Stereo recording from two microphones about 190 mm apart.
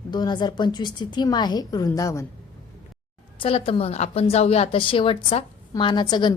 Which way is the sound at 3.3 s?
30° left (ahead or behind).